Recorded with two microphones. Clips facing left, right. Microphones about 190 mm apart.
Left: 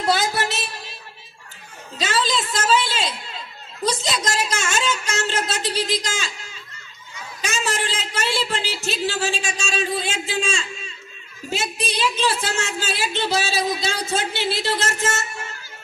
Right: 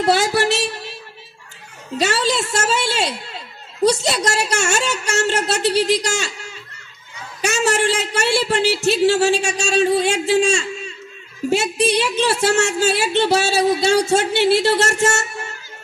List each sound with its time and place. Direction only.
0.0 s speech: 70° right (ahead or behind)
2.0 s speech: 70° right (ahead or behind)
7.4 s speech: 70° right (ahead or behind)